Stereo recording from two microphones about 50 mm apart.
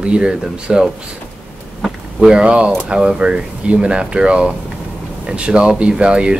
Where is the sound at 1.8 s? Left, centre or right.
Centre.